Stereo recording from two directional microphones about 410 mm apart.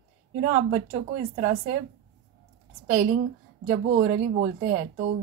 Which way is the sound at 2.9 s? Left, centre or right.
Centre.